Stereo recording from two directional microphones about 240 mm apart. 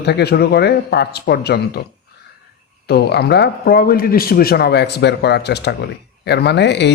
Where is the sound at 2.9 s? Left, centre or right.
Left.